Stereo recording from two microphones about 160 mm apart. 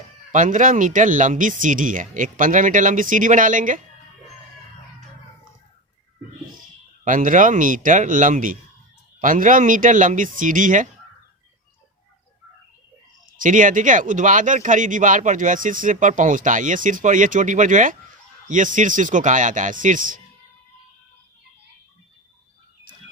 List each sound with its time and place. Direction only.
0.3 s speech: 55° right (ahead or behind)
7.0 s speech: 55° right (ahead or behind)
13.3 s speech: 55° right (ahead or behind)